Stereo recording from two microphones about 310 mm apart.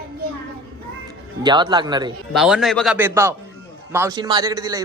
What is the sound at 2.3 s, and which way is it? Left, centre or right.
A man's voice, centre.